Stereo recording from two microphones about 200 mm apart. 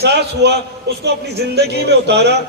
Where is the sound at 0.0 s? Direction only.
55° right (ahead or behind).